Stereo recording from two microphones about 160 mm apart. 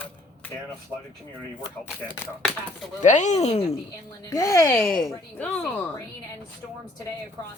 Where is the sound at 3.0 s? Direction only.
50° left (ahead or behind).